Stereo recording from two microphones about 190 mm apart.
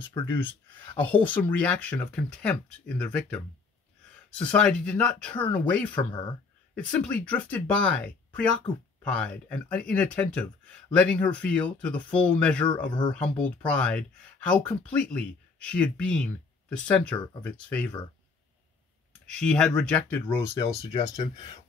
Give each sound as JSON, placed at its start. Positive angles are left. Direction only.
{"t": 0.1, "sound": "speech", "side_deg": 10}
{"t": 19.3, "sound": "speech", "side_deg": 5}
{"t": 20.9, "sound": "speech", "side_deg": 30}